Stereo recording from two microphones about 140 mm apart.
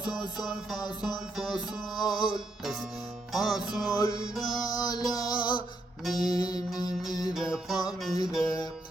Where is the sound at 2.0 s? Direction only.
30° left (ahead or behind).